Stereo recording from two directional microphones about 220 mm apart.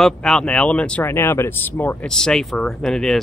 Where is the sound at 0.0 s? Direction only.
Centre (ahead or behind).